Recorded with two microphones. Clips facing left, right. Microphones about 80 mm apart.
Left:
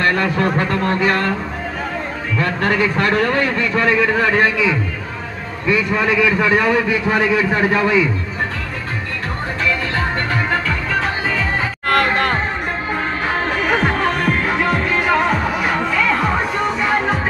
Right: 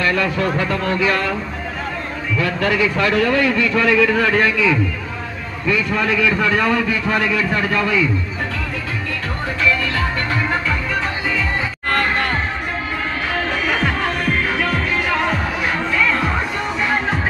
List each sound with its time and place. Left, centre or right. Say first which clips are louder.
0.0 s speech: left 2 dB; left
2.3 s a man's voice: left 1 dB; left
5.7 s a man's voice: left 2 dB; centre
13.3 s music: left 3 dB; left